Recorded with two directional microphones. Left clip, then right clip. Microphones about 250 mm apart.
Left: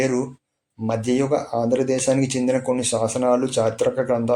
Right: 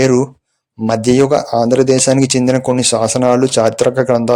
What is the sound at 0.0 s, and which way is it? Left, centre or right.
Speech, right.